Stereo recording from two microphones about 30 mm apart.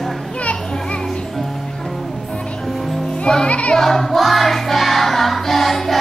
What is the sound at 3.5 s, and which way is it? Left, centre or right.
Music, left.